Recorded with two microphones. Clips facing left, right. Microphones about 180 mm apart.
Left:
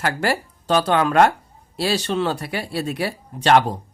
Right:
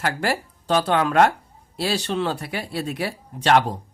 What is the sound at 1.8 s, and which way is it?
Speech, 80° left.